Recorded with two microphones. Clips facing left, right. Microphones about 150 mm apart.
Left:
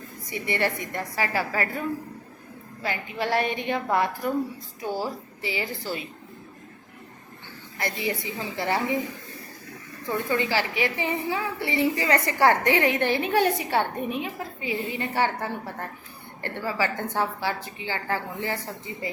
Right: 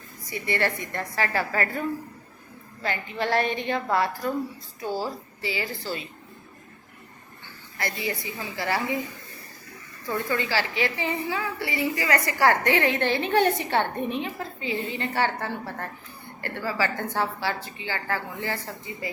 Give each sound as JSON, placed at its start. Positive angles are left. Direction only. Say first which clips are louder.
{"t": 0.3, "sound": "a woman's voice", "louder": "even", "side_deg": 20}
{"t": 2.8, "sound": "a woman's voice", "louder": "right 1 dB", "side_deg": 10}
{"t": 7.8, "sound": "a woman's voice", "louder": "left 2 dB", "side_deg": 20}
{"t": 10.1, "sound": "a woman's voice", "louder": "left 1 dB", "side_deg": 20}